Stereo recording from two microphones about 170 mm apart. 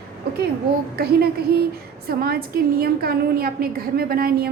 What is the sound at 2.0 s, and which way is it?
A woman's voice, 65° right (ahead or behind).